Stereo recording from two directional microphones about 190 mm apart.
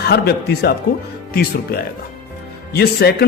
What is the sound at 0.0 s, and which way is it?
Speech, 55° left (ahead or behind).